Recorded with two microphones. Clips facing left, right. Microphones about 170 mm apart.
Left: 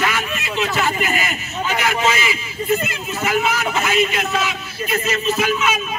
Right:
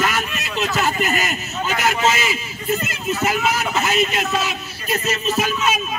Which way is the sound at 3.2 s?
40° right (ahead or behind).